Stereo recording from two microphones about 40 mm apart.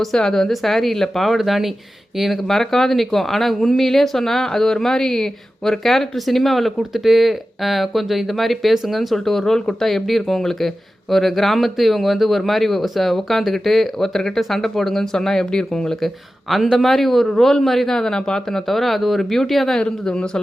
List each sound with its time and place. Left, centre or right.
0.2 s a man's voice: centre
1.4 s speech: centre
2.5 s a man's voice: centre
16.0 s a man's voice: centre
19.8 s speech: left